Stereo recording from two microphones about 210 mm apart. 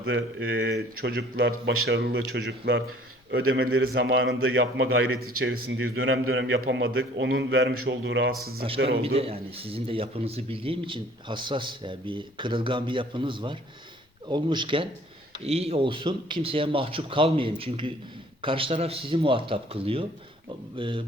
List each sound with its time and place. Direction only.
0.0 s a man's voice: 60° right (ahead or behind)
5.5 s speech: 45° right (ahead or behind)
5.9 s a man's voice: 70° right (ahead or behind)
9.0 s a man's voice: 30° right (ahead or behind)